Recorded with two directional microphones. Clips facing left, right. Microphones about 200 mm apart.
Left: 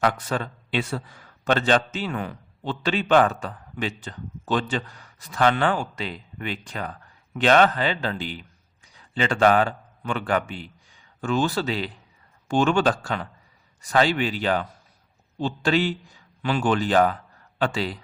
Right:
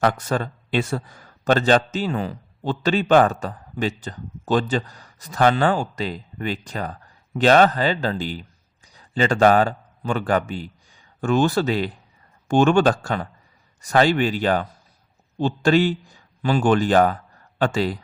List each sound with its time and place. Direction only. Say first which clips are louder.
0.0 s a man's voice: right 3 dB; 45° right (ahead or behind)